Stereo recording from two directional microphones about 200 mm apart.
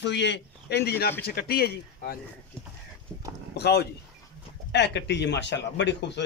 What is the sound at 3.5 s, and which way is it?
Speech, 55° left (ahead or behind).